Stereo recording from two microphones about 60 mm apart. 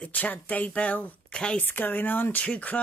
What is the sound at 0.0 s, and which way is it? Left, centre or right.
Speech, left.